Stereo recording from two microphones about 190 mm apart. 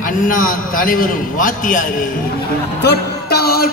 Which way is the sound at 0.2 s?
45° left (ahead or behind).